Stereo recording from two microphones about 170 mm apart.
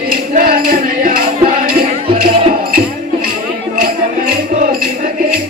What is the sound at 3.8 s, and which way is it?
Music, 55° right (ahead or behind).